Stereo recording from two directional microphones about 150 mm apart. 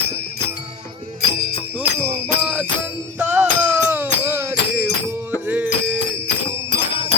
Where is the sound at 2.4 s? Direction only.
10° right (ahead or behind).